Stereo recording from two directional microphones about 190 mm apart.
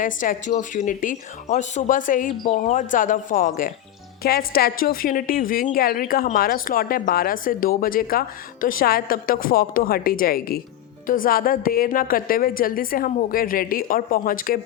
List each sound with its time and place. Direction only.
0.0 s speech: 45° left (ahead or behind)